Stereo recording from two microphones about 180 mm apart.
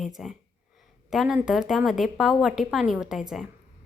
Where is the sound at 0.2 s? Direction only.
Centre (ahead or behind).